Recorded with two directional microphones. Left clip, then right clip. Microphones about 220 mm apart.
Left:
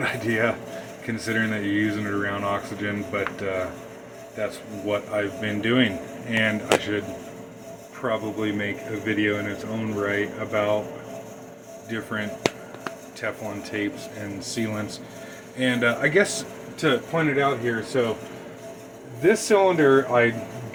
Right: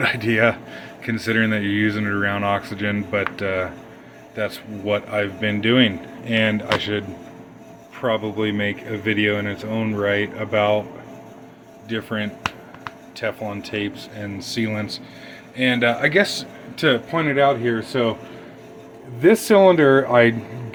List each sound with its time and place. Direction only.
0.0 s a man's voice: 35° right (ahead or behind)
8.0 s a man's voice: 30° right (ahead or behind)
11.9 s a man's voice: 25° right (ahead or behind)
16.7 s speech: 45° right (ahead or behind)
19.2 s speech: 45° right (ahead or behind)